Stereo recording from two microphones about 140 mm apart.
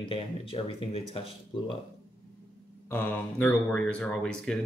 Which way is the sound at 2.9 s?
15° left (ahead or behind).